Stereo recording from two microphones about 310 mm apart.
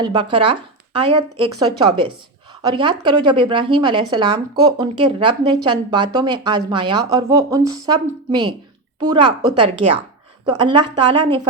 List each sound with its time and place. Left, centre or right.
0.0 s a woman's voice: centre
1.5 s a woman's voice: centre